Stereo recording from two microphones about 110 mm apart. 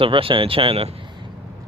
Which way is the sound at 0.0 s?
55° right (ahead or behind).